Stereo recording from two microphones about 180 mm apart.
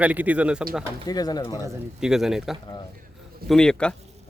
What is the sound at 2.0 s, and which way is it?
Speech, 5° right (ahead or behind).